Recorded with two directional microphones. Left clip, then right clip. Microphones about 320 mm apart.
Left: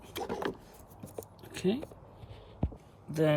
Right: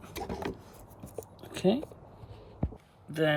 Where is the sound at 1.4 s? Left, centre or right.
Centre.